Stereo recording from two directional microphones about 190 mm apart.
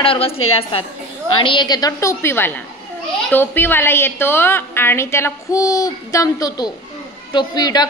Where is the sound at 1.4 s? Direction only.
25° left (ahead or behind).